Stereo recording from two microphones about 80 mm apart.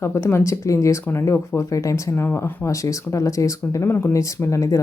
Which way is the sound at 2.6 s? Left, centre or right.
Left.